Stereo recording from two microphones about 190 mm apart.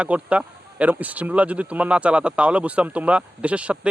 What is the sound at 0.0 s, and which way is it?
Speech, 5° right (ahead or behind).